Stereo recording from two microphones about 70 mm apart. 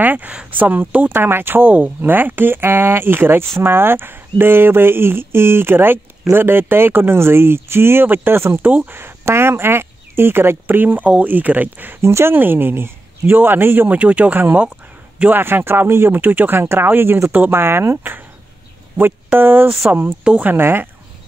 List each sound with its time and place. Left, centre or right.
0.0 s speech: right
12.0 s speech: right; by 20.5 s centre
20.5 s speech: right